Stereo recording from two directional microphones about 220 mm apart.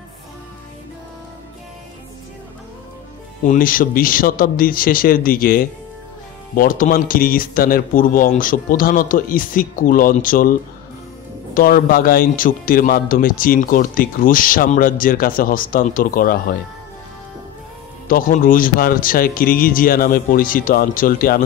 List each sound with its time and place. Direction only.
3.4 s a man's voice: 40° left (ahead or behind)
11.5 s a man's voice: 40° left (ahead or behind)
18.0 s a man's voice: 40° left (ahead or behind)